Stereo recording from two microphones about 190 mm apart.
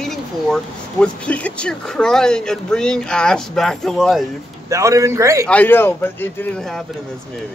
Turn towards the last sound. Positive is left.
turn(degrees=10)  # may be behind; listen again after turning